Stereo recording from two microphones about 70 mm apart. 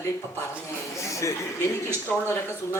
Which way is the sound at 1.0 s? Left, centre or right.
Left.